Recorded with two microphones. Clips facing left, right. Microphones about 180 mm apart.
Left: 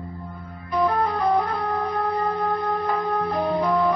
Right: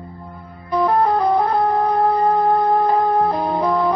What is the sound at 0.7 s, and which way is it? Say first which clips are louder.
Music: right 5 dB; 30° right (ahead or behind).